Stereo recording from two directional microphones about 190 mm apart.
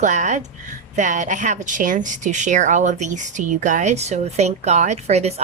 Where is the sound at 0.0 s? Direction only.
40° right (ahead or behind).